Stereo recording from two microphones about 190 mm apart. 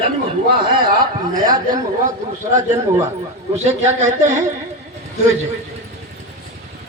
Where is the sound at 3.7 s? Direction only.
40° right (ahead or behind).